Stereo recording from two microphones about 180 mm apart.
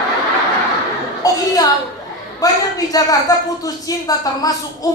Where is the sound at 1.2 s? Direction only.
20° left (ahead or behind).